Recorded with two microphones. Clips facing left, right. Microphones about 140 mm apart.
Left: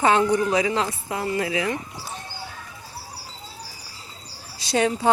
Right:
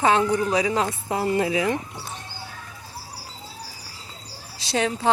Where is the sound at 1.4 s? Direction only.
20° right (ahead or behind).